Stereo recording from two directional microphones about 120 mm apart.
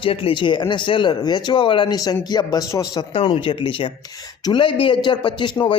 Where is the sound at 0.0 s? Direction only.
50° left (ahead or behind); by 3.0 s 35° left (ahead or behind).